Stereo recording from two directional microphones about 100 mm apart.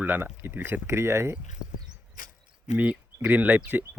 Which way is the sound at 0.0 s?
20° right (ahead or behind).